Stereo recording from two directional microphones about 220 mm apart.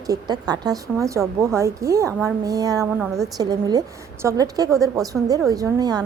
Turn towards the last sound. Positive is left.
turn(degrees=-15)  # may be behind; listen again after turning